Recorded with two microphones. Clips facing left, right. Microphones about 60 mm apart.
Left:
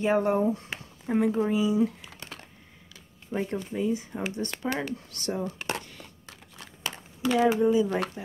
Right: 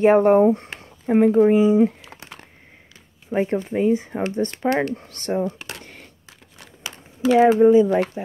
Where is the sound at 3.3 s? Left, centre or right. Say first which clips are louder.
Right 9 dB; right.